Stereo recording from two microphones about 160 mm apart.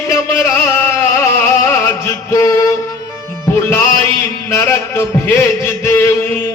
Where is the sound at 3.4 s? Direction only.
15° left (ahead or behind).